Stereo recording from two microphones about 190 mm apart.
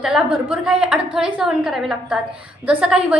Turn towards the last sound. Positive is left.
turn(degrees=-5)  # may be behind; listen again after turning